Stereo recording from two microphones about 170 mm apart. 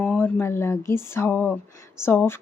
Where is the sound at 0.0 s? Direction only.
10° left (ahead or behind).